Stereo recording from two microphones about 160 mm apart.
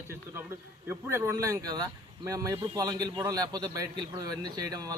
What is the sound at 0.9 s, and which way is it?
Speech, 15° right (ahead or behind).